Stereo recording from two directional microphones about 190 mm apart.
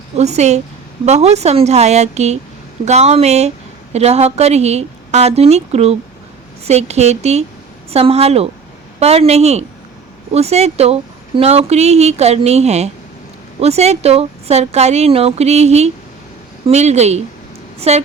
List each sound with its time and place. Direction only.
0.2 s speech: 35° right (ahead or behind)